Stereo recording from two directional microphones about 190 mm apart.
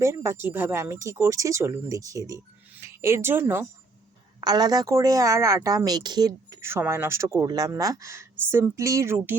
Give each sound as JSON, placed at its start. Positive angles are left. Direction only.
{"t": 0.0, "sound": "a woman's voice", "side_deg": -15}